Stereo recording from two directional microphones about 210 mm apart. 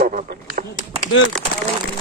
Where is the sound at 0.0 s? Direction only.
45° right (ahead or behind).